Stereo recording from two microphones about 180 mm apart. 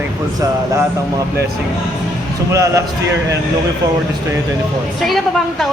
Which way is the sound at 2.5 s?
15° right (ahead or behind).